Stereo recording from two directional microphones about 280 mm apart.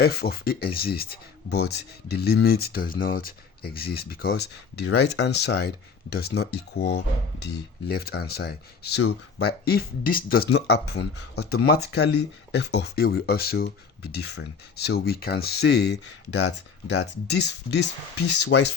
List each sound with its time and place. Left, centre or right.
0.0 s speech: left